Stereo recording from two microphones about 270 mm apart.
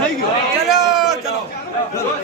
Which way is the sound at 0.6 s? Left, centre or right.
Centre.